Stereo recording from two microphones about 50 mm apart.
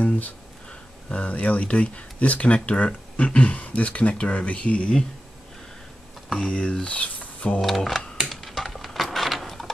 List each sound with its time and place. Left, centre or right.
0.0 s speech: left
6.2 s speech: centre
7.6 s a sound: centre